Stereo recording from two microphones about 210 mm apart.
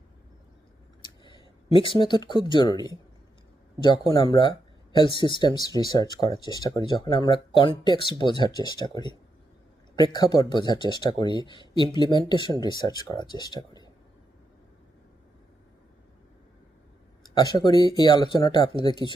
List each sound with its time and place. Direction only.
1.2 s speech: 25° left (ahead or behind)
4.1 s speech: 20° left (ahead or behind)
17.3 s speech: 20° left (ahead or behind)